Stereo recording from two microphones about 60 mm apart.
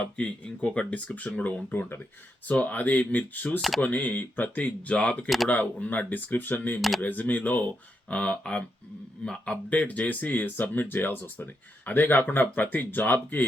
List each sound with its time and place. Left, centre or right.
0.0 s speech: centre